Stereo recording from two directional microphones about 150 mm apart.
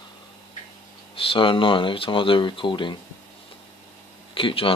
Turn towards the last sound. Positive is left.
turn(degrees=35)  # may be behind; listen again after turning